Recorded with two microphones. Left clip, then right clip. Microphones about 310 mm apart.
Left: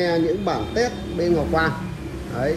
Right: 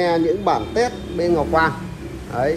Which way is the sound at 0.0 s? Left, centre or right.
Right.